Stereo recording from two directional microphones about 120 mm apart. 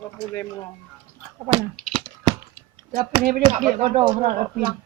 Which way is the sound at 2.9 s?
35° right (ahead or behind).